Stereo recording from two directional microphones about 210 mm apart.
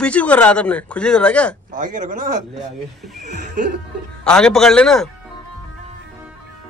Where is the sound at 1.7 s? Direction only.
40° right (ahead or behind).